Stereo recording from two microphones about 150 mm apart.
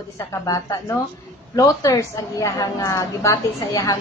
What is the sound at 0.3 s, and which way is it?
A woman's voice, 20° left (ahead or behind).